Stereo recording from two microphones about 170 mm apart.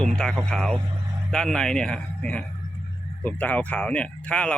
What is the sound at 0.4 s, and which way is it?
Speech, centre (ahead or behind).